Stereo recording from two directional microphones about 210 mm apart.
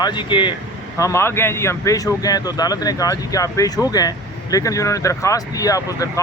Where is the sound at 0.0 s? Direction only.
20° left (ahead or behind).